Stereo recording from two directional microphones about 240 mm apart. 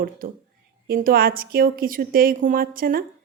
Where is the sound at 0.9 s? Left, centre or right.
Right.